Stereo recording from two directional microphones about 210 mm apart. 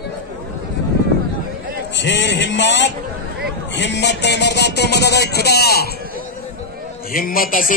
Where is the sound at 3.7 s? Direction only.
55° left (ahead or behind).